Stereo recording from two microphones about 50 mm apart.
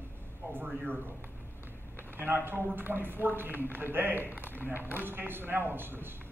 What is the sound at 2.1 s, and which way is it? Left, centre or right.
A man's voice, right.